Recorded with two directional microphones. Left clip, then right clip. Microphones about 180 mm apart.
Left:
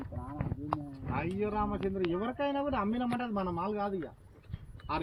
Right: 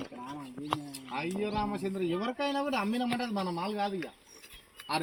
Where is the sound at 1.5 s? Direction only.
25° right (ahead or behind).